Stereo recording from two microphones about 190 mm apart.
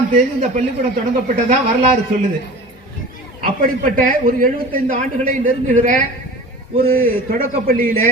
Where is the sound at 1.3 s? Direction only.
40° right (ahead or behind).